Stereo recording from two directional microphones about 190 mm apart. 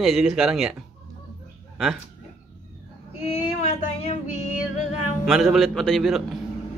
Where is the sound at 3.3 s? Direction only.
30° left (ahead or behind).